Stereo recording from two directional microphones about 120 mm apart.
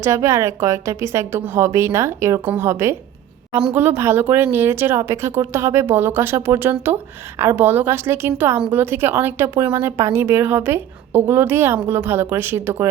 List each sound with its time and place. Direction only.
0.0 s speech: 25° right (ahead or behind)